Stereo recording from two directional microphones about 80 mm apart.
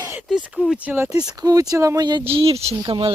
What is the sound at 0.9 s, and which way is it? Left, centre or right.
Speech, right.